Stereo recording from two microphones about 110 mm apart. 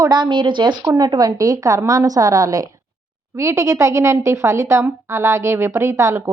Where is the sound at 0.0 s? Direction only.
40° right (ahead or behind).